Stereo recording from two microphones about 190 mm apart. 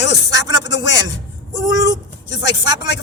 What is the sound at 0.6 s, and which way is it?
Music, 70° left (ahead or behind).